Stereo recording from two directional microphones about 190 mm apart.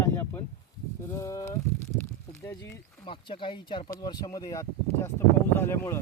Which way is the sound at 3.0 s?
25° left (ahead or behind).